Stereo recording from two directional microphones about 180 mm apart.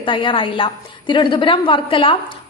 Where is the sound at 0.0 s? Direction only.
25° left (ahead or behind).